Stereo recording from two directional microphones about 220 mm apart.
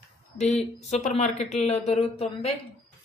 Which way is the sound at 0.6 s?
30° left (ahead or behind).